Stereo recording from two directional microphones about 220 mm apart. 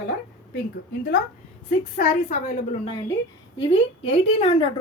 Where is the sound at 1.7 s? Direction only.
35° left (ahead or behind).